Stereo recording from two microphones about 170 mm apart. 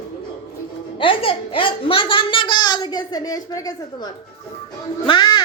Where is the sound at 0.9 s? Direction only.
30° left (ahead or behind).